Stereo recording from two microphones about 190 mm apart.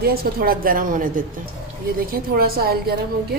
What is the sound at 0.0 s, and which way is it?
A woman's voice, 55° right (ahead or behind).